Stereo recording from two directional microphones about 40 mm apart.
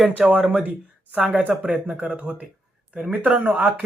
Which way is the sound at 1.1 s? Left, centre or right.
Right.